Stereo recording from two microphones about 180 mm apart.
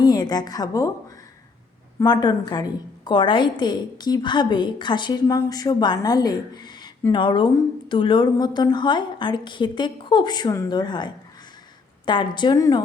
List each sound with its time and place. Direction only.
0.0 s a woman's voice: 20° left (ahead or behind)
2.0 s a woman's voice: 25° left (ahead or behind)